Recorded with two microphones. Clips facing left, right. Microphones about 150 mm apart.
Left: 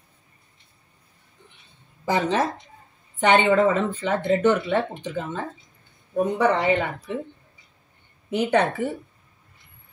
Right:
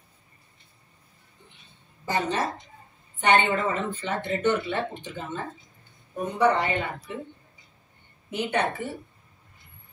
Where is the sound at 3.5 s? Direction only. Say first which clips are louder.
Left 8 dB; 90° left.